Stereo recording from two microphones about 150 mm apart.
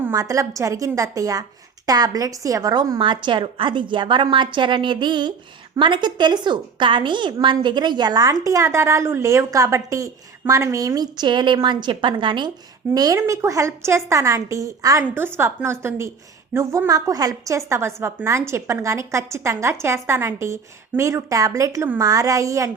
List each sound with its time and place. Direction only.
0.0 s a woman's voice: 20° right (ahead or behind)